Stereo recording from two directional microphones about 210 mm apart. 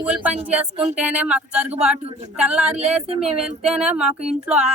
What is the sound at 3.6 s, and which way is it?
Speech, 5° right (ahead or behind).